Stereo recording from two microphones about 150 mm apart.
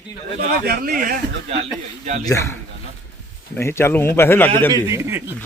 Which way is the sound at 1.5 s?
45° right (ahead or behind).